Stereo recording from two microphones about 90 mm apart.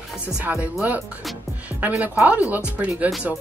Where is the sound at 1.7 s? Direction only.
20° right (ahead or behind).